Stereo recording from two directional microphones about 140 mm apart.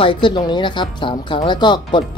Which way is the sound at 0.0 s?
40° left (ahead or behind).